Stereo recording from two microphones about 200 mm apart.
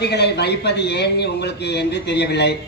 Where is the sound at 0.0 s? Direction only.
55° left (ahead or behind).